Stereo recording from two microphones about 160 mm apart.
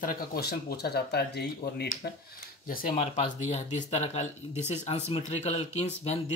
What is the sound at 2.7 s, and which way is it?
Speech, 65° left (ahead or behind).